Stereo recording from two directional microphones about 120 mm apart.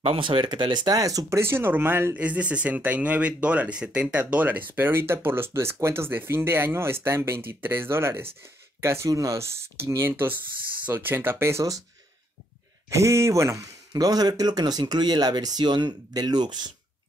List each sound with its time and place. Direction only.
0.0 s speech: 50° right (ahead or behind); by 11.8 s 25° right (ahead or behind)
12.9 s speech: 25° right (ahead or behind)